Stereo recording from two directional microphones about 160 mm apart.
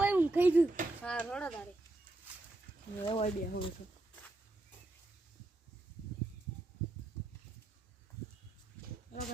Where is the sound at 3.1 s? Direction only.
40° left (ahead or behind).